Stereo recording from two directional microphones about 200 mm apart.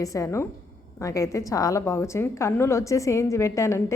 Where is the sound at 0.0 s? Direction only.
15° left (ahead or behind).